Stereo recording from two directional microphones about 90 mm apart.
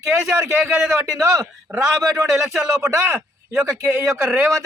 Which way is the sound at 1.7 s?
10° right (ahead or behind).